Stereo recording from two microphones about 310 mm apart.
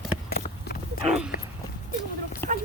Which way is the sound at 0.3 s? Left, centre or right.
Left.